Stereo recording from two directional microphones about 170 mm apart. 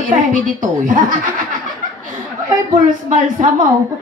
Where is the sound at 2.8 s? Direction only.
50° right (ahead or behind).